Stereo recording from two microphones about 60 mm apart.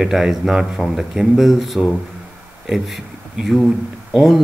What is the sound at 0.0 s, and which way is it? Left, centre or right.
Speech, centre.